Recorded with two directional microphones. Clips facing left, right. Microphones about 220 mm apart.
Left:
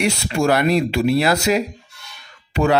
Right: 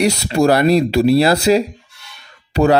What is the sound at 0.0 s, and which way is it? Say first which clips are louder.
Speech: right 5 dB; 35° right (ahead or behind).